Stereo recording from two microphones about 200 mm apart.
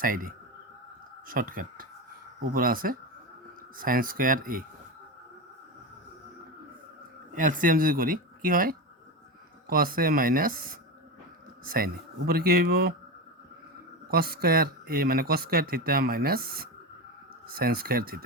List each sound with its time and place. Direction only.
0.0 s speech: 45° right (ahead or behind)
7.3 s speech: 40° right (ahead or behind)
14.1 s speech: 50° right (ahead or behind)